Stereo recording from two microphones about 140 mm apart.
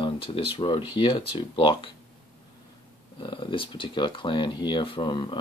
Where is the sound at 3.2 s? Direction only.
35° left (ahead or behind).